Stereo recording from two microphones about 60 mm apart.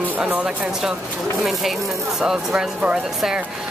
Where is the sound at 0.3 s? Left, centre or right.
Right.